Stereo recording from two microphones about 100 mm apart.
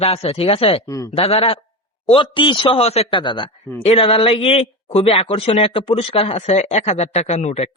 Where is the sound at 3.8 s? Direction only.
75° left (ahead or behind); by 7.7 s 90° left.